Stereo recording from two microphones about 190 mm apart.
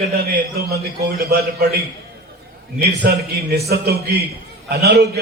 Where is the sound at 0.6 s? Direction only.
55° right (ahead or behind).